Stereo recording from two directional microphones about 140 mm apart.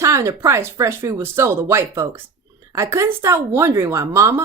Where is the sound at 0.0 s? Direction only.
25° right (ahead or behind).